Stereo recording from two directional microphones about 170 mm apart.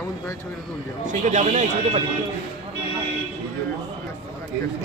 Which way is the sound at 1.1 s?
45° right (ahead or behind).